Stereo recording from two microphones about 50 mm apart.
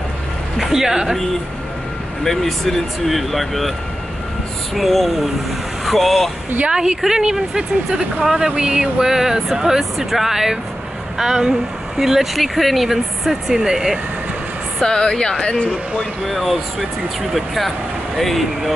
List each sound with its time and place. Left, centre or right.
0.6 s speech: centre
2.2 s speech: centre
4.7 s speech: centre
6.6 s speech: centre
14.8 s speech: centre
16.3 s speech: centre